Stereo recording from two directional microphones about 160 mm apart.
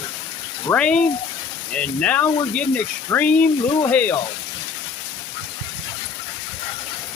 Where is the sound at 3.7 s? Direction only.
25° left (ahead or behind).